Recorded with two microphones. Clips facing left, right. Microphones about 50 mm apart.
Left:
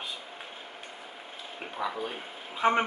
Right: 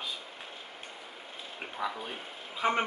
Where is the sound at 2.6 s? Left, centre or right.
Centre.